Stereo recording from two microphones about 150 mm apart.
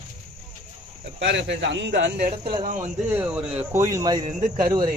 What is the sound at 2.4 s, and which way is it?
Speech, 30° right (ahead or behind).